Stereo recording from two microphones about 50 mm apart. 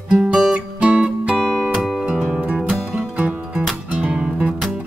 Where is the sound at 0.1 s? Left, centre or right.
Centre.